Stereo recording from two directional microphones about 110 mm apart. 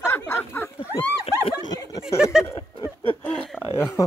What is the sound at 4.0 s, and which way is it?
Speech, 30° left (ahead or behind).